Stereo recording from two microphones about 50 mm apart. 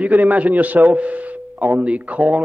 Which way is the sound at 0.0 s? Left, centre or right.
Right.